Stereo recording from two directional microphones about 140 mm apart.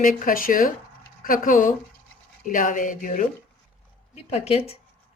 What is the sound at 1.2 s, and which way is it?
Speech, 80° left.